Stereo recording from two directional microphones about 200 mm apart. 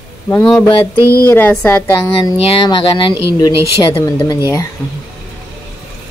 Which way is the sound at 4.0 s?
15° left (ahead or behind).